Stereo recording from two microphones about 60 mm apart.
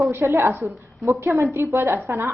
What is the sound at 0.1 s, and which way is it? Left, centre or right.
A woman's voice, right.